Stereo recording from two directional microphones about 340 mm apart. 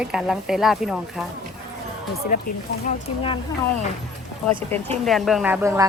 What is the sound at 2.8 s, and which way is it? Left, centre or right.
Speech, centre.